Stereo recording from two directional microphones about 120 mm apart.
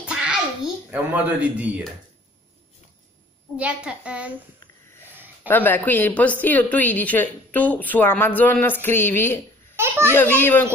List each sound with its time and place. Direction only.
0.0 s a sound: 10° right (ahead or behind)
0.8 s speech: 10° right (ahead or behind)
3.5 s speech: 10° right (ahead or behind)
5.1 s a sound: 15° right (ahead or behind)
5.5 s a woman's voice: 15° left (ahead or behind)
9.8 s a child's voice: 20° right (ahead or behind)
10.1 s a woman's voice: 15° left (ahead or behind)